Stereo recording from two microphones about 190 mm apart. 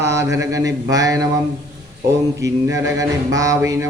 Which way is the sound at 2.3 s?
15° right (ahead or behind).